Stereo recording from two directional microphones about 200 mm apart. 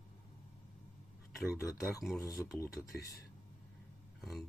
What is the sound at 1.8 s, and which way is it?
Speech, centre (ahead or behind).